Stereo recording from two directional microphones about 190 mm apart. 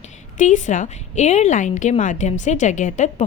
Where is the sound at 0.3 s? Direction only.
40° left (ahead or behind).